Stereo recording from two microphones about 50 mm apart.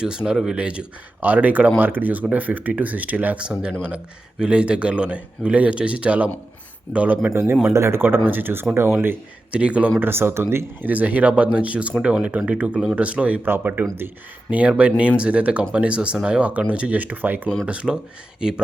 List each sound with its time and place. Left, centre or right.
0.0 s speech: centre
1.2 s speech: right
3.4 s speech: centre
7.7 s speech: right
8.3 s speech: right
8.7 s speech: right
9.5 s speech: right
10.0 s speech: right
10.8 s speech: right
13.4 s speech: right
14.8 s speech: right
17.7 s speech: centre